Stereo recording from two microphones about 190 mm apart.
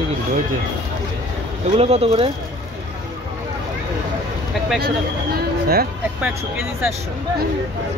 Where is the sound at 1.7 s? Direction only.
30° right (ahead or behind).